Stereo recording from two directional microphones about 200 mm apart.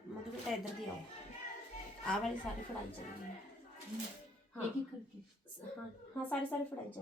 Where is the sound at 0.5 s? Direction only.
Centre (ahead or behind).